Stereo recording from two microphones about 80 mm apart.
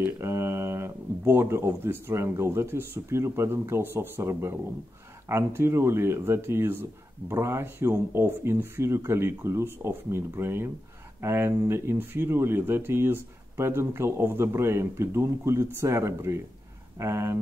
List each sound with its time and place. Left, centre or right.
0.0 s speech: right